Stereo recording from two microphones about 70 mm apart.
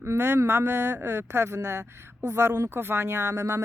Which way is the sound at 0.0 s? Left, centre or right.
Right.